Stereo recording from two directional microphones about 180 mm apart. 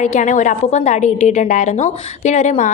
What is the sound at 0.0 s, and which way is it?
A woman's voice, 40° left (ahead or behind).